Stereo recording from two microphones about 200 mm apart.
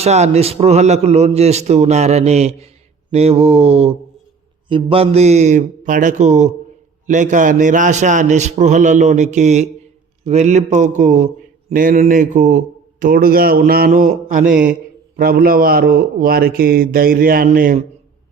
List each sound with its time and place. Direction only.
0.0 s a man's voice: 35° right (ahead or behind)
14.5 s a man's voice: 5° right (ahead or behind)
15.1 s a man's voice: 45° right (ahead or behind)